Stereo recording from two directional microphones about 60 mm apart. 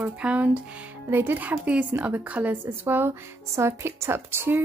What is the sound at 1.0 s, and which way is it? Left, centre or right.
A woman's voice, right.